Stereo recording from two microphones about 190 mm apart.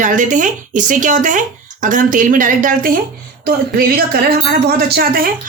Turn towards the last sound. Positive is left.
turn(degrees=-50)  # may be behind; listen again after turning